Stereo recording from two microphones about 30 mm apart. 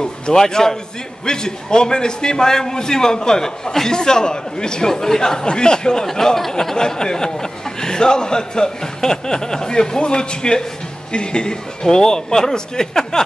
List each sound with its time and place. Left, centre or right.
0.0 s a man's voice: left
6.0 s a man's voice: centre